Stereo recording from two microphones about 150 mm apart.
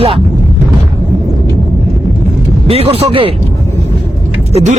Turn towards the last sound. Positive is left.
turn(degrees=-45)  # may be behind; listen again after turning